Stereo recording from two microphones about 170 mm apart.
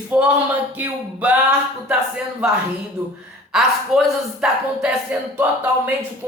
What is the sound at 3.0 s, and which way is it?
Speech, 20° right (ahead or behind).